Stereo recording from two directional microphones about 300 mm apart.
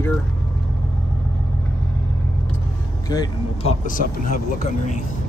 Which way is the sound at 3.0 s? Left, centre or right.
Centre.